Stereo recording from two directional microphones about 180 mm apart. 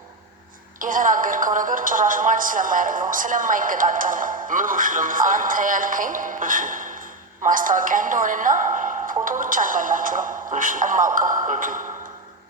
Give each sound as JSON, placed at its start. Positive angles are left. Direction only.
{"t": 0.8, "sound": "a woman's voice", "side_deg": -50}